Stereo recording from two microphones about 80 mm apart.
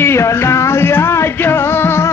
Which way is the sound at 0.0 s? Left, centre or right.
Left.